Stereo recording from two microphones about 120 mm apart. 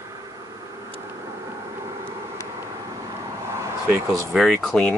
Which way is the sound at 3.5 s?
25° right (ahead or behind).